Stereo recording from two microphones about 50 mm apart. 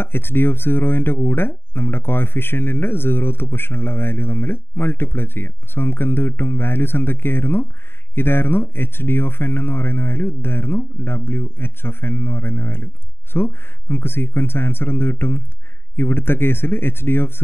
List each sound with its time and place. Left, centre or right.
0.0 s speech: left